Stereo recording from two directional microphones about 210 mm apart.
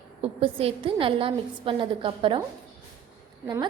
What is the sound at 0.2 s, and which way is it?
A woman's voice, 25° right (ahead or behind).